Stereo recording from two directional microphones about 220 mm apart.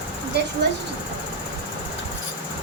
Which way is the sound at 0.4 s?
50° right (ahead or behind).